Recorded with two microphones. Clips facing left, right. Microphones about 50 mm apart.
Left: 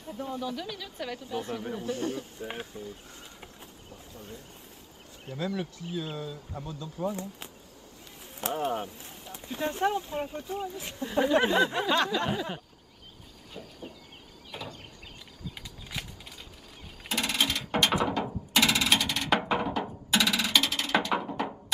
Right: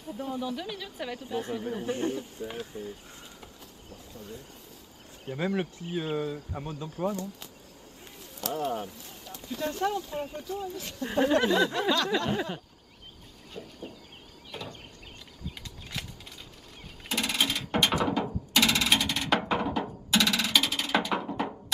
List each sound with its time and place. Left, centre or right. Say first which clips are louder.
0.2 s speech: right 1 dB; centre
1.2 s speech: right 3 dB; right
2.1 s speech: right 1 dB; left
2.7 s speech: right 2 dB; right
5.3 s speech: right 3 dB; right
8.2 s speech: left 1 dB; left
13.5 s chicken: right 2 dB; centre
14.5 s a sound: even; centre
15.9 s a sound: even; centre